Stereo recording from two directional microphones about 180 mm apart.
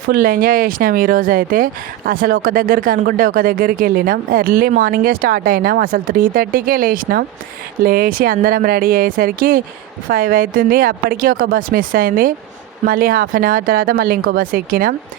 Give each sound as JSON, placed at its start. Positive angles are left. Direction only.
{"t": 0.1, "sound": "speech", "side_deg": -50}